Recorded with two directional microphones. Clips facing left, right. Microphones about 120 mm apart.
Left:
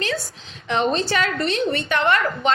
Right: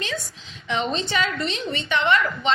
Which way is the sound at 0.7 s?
45° left (ahead or behind).